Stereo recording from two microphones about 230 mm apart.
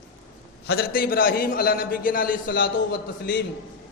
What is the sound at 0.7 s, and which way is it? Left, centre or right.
A man's voice, left.